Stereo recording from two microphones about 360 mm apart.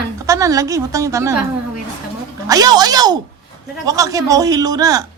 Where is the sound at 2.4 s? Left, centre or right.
Centre.